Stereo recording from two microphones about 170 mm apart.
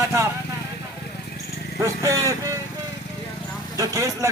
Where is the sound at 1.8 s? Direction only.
20° right (ahead or behind).